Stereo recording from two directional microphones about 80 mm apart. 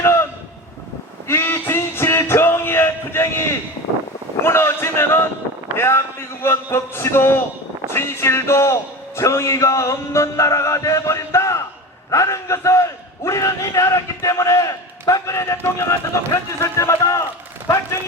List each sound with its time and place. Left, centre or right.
0.0 s a sound: left
1.3 s music: left
4.4 s a man's voice: left